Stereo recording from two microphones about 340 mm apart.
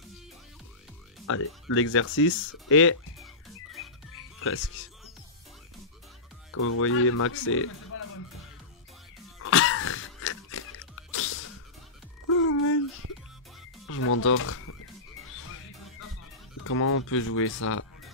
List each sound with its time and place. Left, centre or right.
1.2 s speech: left
4.4 s speech: left
6.5 s speech: left
9.4 s a sound: left
13.0 s music: right
13.8 s speech: left
16.6 s speech: left